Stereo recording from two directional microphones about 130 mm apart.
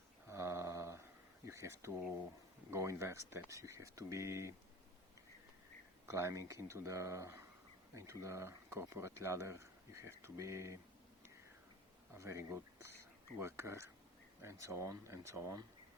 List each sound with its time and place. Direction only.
0.3 s a sound: 20° right (ahead or behind)
1.5 s speech: 20° right (ahead or behind)
6.1 s speech: 20° right (ahead or behind)
12.1 s speech: 20° right (ahead or behind)